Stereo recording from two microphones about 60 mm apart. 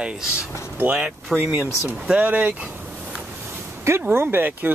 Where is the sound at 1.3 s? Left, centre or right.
Right.